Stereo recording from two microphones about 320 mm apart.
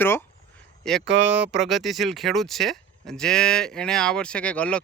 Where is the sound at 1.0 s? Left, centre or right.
Right.